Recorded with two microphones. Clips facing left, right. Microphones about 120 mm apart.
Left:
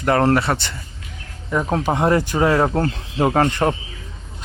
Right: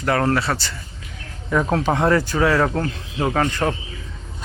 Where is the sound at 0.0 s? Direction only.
25° left (ahead or behind).